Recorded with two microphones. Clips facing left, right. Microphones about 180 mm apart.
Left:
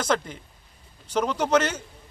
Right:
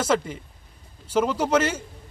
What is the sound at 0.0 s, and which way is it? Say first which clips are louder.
Speech: right 2 dB; 5° right (ahead or behind).